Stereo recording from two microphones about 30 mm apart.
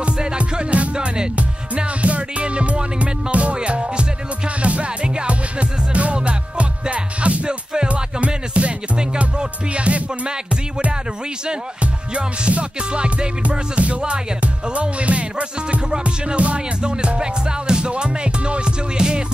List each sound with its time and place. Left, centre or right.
0.4 s music: right
0.9 s music: right
2.0 s music: right
7.4 s music: right
8.6 s music: right
11.8 s music: right
13.4 s music: right
17.2 s music: right